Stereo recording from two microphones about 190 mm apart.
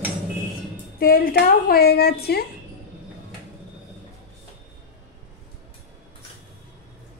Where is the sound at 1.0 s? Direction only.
50° left (ahead or behind).